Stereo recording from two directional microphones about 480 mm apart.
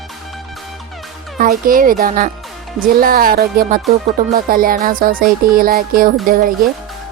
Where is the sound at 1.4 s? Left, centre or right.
Centre.